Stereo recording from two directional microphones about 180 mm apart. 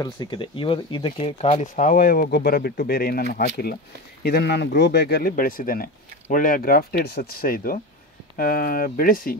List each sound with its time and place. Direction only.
0.0 s speech: 25° left (ahead or behind); by 9.4 s 55° left (ahead or behind)